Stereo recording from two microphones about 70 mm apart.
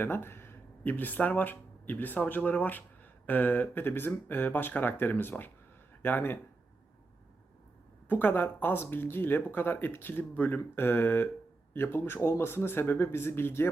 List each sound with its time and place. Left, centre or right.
0.0 s speech: left
8.0 s speech: left